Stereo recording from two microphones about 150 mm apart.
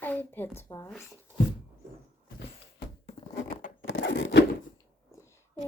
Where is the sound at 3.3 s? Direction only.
65° left (ahead or behind); by 4.4 s 85° left.